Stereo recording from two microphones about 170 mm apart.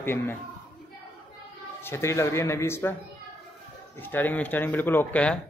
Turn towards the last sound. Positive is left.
turn(degrees=5)  # may be behind; listen again after turning